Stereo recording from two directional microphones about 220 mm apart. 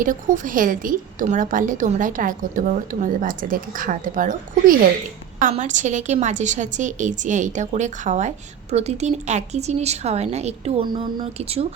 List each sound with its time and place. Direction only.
0.0 s a woman's voice: 35° right (ahead or behind)